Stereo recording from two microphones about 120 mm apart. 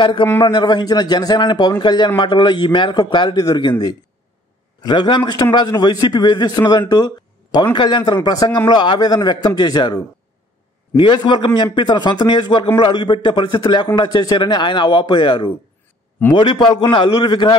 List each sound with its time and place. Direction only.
0.0 s a man's voice: 40° left (ahead or behind)
4.8 s a man's voice: 40° left (ahead or behind)